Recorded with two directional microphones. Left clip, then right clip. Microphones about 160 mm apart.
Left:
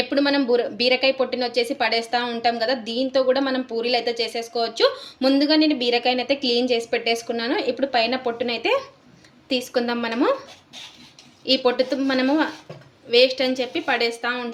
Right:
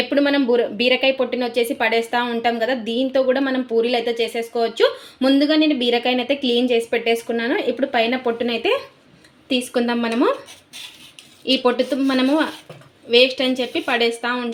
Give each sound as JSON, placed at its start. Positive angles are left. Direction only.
{"t": 0.1, "sound": "a woman's voice", "side_deg": -35}
{"t": 6.7, "sound": "a woman's voice", "side_deg": -30}
{"t": 11.4, "sound": "speech", "side_deg": -45}